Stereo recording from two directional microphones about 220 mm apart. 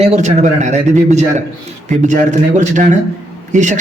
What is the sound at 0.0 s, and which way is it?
A man's voice, 30° right (ahead or behind).